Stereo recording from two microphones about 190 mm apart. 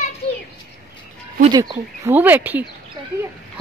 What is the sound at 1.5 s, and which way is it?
A woman's voice, 20° right (ahead or behind).